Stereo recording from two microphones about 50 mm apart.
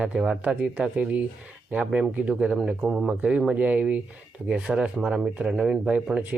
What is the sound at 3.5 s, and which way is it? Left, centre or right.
Speech, right.